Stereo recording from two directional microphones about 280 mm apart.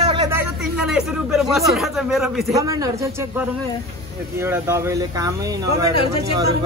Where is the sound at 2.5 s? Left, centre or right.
Centre.